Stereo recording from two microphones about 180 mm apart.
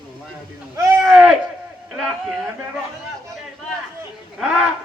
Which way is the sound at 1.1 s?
5° right (ahead or behind).